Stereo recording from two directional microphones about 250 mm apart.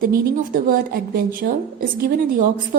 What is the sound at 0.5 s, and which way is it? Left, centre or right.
Speech, right.